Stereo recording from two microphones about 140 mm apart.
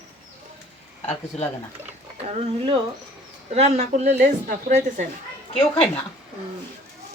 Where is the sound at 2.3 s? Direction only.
50° right (ahead or behind).